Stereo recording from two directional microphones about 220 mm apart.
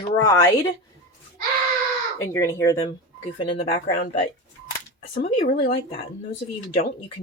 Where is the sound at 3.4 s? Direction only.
25° left (ahead or behind).